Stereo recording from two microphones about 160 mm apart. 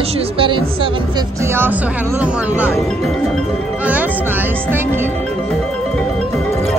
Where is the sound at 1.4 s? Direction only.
15° right (ahead or behind).